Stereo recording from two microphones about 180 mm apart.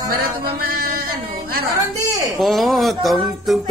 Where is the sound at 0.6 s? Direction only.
55° right (ahead or behind).